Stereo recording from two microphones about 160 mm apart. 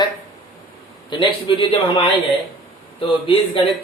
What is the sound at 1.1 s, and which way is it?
Speech, 30° left (ahead or behind).